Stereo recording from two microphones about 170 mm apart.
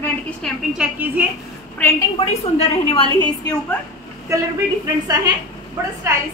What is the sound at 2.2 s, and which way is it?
Speech, 35° left (ahead or behind).